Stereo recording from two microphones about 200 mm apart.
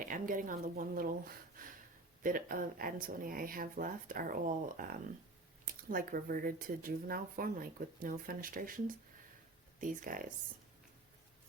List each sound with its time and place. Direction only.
0.0 s speech: 40° right (ahead or behind)
9.8 s speech: 40° right (ahead or behind)